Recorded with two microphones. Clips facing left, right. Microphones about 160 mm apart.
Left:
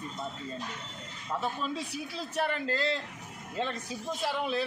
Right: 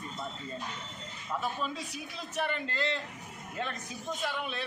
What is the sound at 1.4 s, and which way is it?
Speech, 30° left (ahead or behind).